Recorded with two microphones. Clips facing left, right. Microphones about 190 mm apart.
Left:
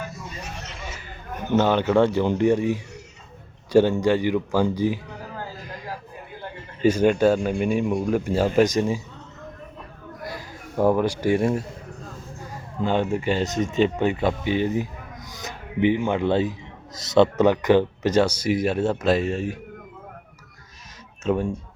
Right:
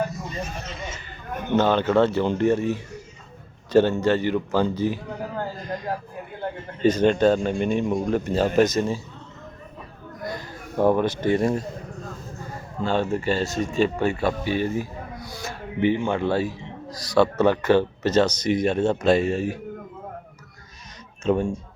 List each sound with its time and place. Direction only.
1.5 s a man's voice: 15° left (ahead or behind)
6.8 s a man's voice: 10° left (ahead or behind)
10.2 s a man's voice: 5° left (ahead or behind)
12.8 s a man's voice: 15° left (ahead or behind)
15.3 s a sound: 15° left (ahead or behind)
16.0 s a man's voice: 20° left (ahead or behind); by 19.5 s centre (ahead or behind)
21.2 s speech: 5° left (ahead or behind)